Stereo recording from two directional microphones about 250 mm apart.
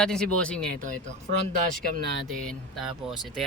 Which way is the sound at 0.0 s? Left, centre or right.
Centre.